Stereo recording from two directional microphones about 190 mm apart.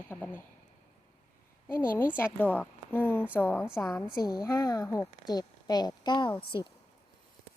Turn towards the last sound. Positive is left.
turn(degrees=25)  # may be behind; listen again after turning